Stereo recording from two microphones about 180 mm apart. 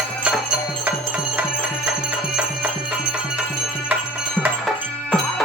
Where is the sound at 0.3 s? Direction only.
5° right (ahead or behind).